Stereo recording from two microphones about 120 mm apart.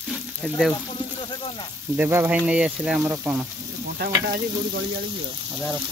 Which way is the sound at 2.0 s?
15° right (ahead or behind).